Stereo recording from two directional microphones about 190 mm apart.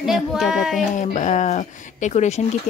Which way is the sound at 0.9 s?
40° left (ahead or behind).